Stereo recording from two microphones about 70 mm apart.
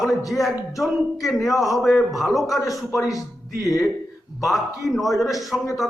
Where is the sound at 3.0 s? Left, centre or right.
Left.